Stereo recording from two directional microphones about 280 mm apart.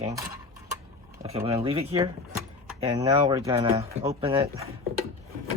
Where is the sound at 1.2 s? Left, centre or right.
Centre.